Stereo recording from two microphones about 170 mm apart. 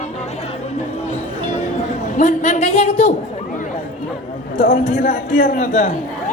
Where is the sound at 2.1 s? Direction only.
45° left (ahead or behind).